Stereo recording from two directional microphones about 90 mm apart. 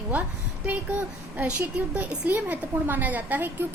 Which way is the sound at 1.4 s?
15° right (ahead or behind).